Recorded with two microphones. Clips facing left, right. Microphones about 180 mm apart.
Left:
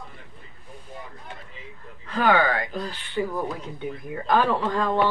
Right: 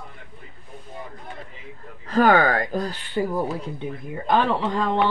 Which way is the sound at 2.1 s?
45° right (ahead or behind).